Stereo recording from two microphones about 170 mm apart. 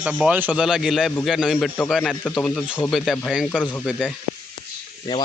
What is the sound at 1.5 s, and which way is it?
Speech, 10° left (ahead or behind).